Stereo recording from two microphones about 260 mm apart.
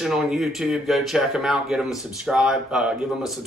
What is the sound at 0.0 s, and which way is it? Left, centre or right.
Speech, centre.